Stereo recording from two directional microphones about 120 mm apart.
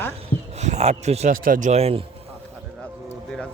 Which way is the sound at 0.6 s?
70° right (ahead or behind).